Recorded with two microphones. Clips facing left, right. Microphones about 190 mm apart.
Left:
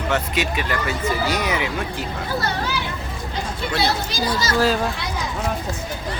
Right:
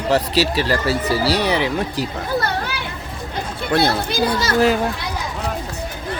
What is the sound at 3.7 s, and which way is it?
Speech, 55° right (ahead or behind).